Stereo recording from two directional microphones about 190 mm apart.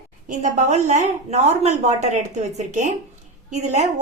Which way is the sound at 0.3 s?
40° right (ahead or behind).